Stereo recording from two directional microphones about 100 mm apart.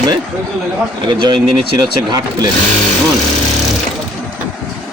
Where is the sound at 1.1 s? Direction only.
50° right (ahead or behind).